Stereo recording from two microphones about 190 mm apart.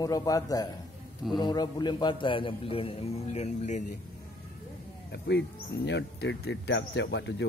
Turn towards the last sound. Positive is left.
turn(degrees=70)  # may be behind; listen again after turning